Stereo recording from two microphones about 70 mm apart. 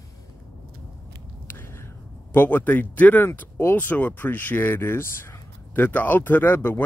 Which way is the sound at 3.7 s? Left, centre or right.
Left.